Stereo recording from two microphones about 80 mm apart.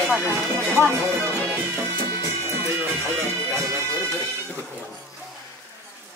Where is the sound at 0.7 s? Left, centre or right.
Right.